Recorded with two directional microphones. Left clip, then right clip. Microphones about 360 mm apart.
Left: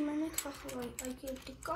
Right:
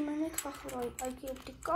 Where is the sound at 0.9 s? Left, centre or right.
Right.